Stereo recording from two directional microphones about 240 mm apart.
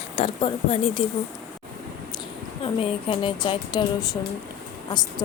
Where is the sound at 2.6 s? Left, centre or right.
Left.